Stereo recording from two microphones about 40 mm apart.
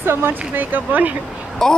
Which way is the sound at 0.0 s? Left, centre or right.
Right.